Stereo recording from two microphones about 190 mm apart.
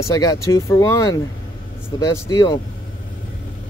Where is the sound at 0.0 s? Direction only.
20° left (ahead or behind).